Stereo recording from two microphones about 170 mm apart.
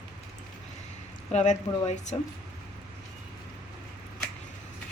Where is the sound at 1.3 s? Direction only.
40° left (ahead or behind).